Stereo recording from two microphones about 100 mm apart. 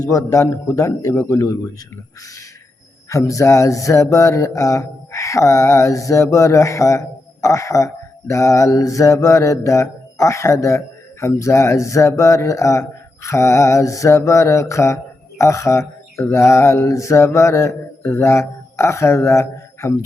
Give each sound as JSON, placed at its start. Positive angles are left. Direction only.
{"t": 0.0, "sound": "mantra", "side_deg": 35}
{"t": 3.1, "sound": "mantra", "side_deg": 30}